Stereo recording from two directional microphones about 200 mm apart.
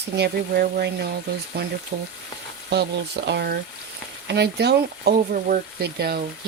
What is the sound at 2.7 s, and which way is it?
Speech, 55° right (ahead or behind).